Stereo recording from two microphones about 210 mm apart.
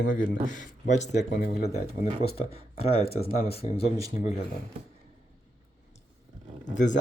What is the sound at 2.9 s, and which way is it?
Speech, 30° left (ahead or behind).